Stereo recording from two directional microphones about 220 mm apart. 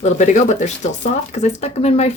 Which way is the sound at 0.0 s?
30° left (ahead or behind).